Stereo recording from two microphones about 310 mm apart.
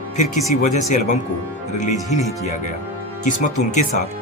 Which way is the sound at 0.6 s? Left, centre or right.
Left.